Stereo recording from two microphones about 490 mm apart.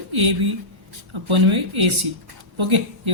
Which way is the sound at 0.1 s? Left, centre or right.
Right.